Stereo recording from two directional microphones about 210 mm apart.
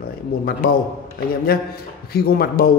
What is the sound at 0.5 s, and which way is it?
Speech, 45° left (ahead or behind).